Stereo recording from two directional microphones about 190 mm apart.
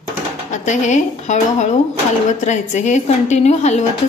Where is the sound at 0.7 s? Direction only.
40° left (ahead or behind).